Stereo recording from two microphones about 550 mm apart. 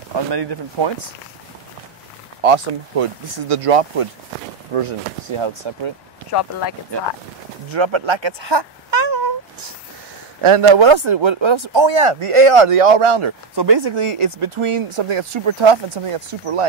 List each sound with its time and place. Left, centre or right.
0.1 s speech: right
2.4 s speech: right
5.4 s speech: right
7.7 s speech: right
10.4 s speech: right